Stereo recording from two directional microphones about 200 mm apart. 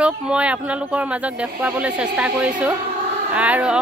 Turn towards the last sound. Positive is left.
turn(degrees=-5)  # may be behind; listen again after turning